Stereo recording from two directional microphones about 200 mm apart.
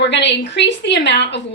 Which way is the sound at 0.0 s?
60° left (ahead or behind).